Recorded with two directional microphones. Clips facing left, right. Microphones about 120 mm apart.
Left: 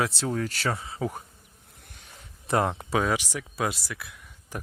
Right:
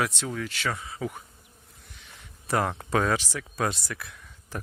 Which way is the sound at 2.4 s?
25° left (ahead or behind).